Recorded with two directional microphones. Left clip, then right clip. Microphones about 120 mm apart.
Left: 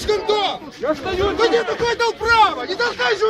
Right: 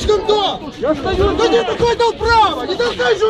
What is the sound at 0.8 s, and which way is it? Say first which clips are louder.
Speech: right 4 dB; 40° left (ahead or behind).